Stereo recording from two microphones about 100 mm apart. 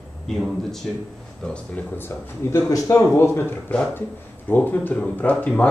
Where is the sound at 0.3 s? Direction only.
5° left (ahead or behind).